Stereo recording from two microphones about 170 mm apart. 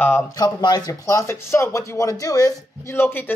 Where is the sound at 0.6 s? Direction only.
25° left (ahead or behind).